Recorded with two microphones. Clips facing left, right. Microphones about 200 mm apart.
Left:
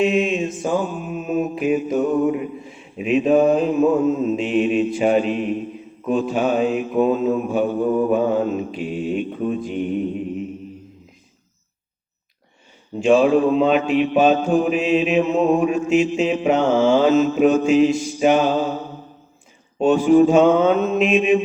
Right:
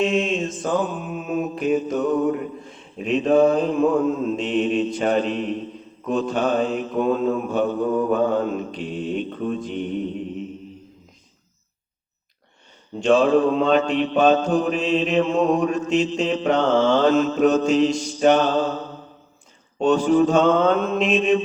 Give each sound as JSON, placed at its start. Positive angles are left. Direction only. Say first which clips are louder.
{"t": 0.0, "sound": "mantra", "louder": "left 3 dB", "side_deg": 10}
{"t": 13.0, "sound": "mantra", "louder": "left 2 dB", "side_deg": 10}